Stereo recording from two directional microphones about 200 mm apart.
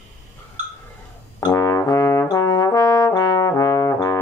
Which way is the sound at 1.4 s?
20° left (ahead or behind).